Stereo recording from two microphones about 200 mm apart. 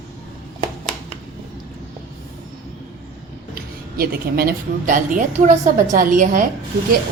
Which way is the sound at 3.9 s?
50° right (ahead or behind).